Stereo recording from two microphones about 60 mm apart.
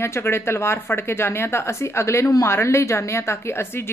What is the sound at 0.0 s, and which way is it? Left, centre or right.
Speech, left.